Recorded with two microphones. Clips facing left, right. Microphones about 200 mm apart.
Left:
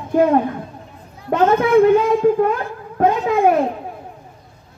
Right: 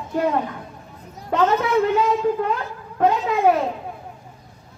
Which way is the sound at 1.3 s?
50° left (ahead or behind).